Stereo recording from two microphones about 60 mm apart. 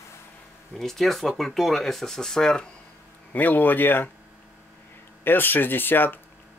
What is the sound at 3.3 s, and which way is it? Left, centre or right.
Speech, left.